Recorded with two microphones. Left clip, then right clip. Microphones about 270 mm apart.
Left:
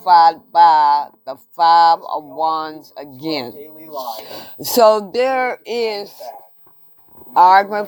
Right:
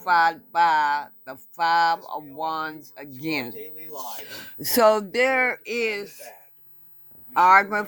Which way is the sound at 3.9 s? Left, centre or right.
Right.